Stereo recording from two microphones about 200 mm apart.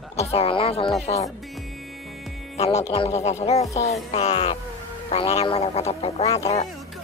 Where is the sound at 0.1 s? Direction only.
30° left (ahead or behind).